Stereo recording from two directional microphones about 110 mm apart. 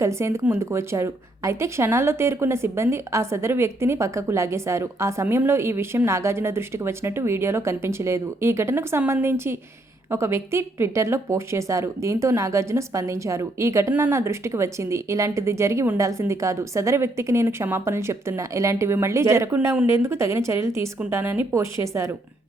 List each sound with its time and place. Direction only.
0.0 s speech: 25° right (ahead or behind)